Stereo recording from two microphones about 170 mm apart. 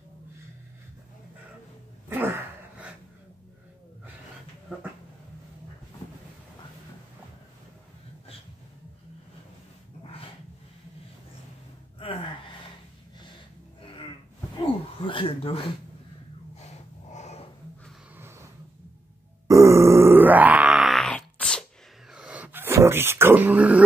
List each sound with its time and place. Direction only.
2.0 s a sound: 15° right (ahead or behind)
12.0 s gasp: 35° left (ahead or behind)
15.0 s speech: 30° left (ahead or behind)
17.1 s dog: 40° left (ahead or behind)
19.4 s grunt: 20° right (ahead or behind); by 21.6 s 5° left (ahead or behind)
22.1 s dog: 5° right (ahead or behind)